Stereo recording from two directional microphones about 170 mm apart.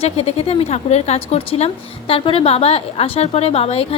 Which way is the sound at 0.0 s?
35° left (ahead or behind).